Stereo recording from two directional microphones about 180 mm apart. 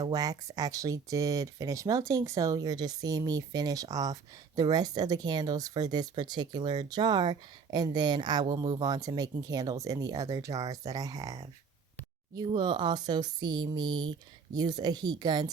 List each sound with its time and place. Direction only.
0.0 s speech: 20° right (ahead or behind)